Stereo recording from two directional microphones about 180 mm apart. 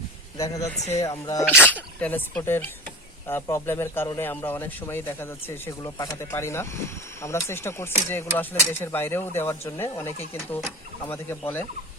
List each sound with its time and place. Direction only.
0.3 s speech: 20° left (ahead or behind)